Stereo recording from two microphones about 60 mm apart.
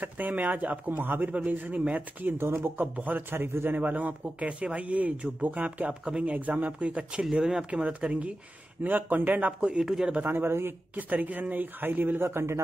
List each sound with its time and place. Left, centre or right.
0.0 s a man's voice: right
2.2 s speech: right
2.8 s a man's voice: right
7.2 s a man's voice: centre; by 9.5 s right
9.6 s speech: centre
10.2 s speech: right
11.0 s speech: right